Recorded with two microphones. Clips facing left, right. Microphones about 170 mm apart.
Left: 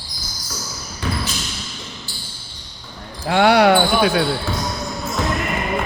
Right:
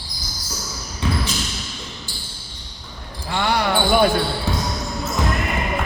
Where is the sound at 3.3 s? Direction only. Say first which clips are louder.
Left 8 dB; 75° left (ahead or behind).